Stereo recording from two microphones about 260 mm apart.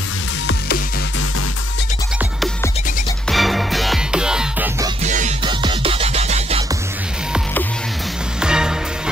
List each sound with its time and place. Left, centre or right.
3.3 s music: centre
5.0 s music: right
8.4 s music: centre